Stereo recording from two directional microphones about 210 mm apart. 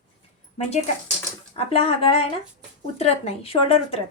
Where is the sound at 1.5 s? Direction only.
30° left (ahead or behind).